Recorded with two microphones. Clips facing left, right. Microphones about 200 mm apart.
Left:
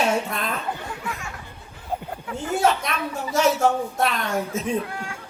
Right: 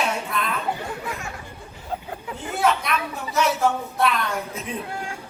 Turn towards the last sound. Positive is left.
turn(degrees=45)  # may be behind; listen again after turning